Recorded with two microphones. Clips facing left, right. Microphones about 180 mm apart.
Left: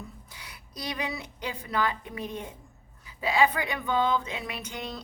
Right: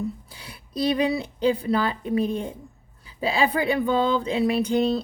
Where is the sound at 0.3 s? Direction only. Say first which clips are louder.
Right 5 dB; 30° right (ahead or behind).